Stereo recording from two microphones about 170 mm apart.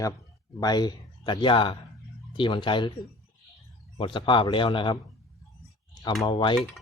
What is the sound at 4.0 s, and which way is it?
Speech, 30° left (ahead or behind).